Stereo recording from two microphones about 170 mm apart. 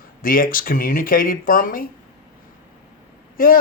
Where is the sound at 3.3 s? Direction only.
55° left (ahead or behind).